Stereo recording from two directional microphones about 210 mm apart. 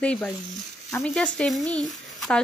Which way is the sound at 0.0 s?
5° left (ahead or behind).